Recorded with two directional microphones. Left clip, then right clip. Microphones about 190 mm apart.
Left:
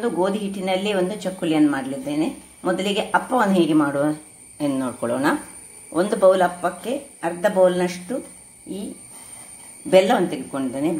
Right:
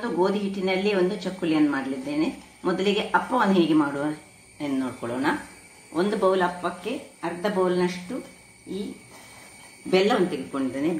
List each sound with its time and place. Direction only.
0.2 s a woman's voice: 45° left (ahead or behind)
9.8 s a woman's voice: 50° left (ahead or behind)